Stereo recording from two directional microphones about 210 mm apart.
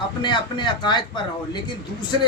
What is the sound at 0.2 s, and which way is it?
A man's voice, 20° left (ahead or behind).